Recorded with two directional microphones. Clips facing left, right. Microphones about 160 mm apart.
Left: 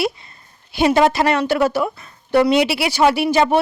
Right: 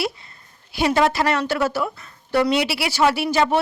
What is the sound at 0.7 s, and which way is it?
A woman's voice, 20° left (ahead or behind).